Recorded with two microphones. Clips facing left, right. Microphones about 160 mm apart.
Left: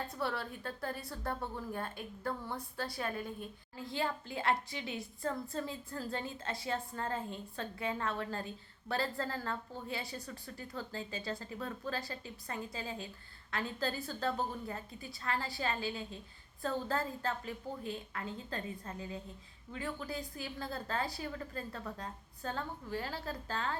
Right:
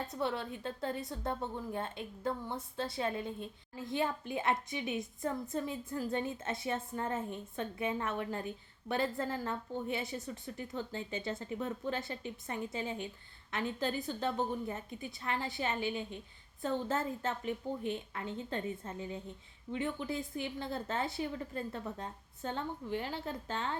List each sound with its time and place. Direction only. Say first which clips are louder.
0.1 s a woman's voice: right 2 dB; 20° right (ahead or behind)